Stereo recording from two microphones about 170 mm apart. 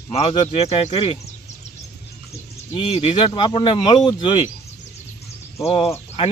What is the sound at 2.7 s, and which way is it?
Speech, 30° left (ahead or behind).